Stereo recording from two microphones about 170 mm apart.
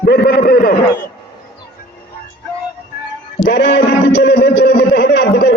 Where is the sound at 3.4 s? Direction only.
70° left (ahead or behind).